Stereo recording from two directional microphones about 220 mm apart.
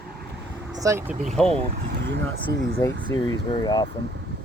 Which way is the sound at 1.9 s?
55° right (ahead or behind).